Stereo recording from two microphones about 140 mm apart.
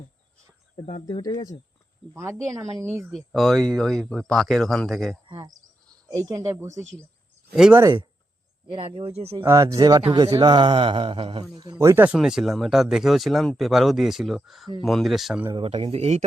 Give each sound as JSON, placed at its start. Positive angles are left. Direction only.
{"t": 0.9, "sound": "speech", "side_deg": 35}
{"t": 2.1, "sound": "speech", "side_deg": -20}
{"t": 3.0, "sound": "speech", "side_deg": 0}
{"t": 5.4, "sound": "speech", "side_deg": -25}
{"t": 7.5, "sound": "speech", "side_deg": -5}
{"t": 9.0, "sound": "speech", "side_deg": -45}
{"t": 9.4, "sound": "speech", "side_deg": -20}
{"t": 10.3, "sound": "mantra", "side_deg": -30}
{"t": 11.8, "sound": "speech", "side_deg": -15}
{"t": 12.1, "sound": "speech", "side_deg": -5}
{"t": 15.5, "sound": "speech", "side_deg": -40}